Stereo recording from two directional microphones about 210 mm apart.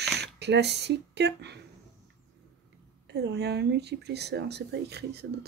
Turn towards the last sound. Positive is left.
turn(degrees=-50)  # may be behind; listen again after turning